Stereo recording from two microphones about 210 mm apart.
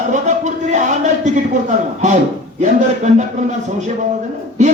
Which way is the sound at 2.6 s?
35° right (ahead or behind).